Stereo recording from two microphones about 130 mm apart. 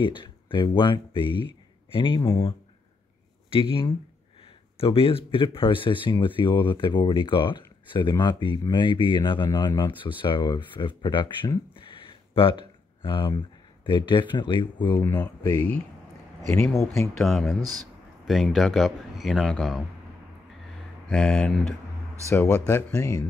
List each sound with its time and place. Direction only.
0.0 s speech: 40° left (ahead or behind)
3.5 s speech: 45° left (ahead or behind)
15.0 s speech: 25° left (ahead or behind)
17.2 s speech: centre (ahead or behind)
21.1 s speech: 5° left (ahead or behind)
22.3 s speech: 20° left (ahead or behind)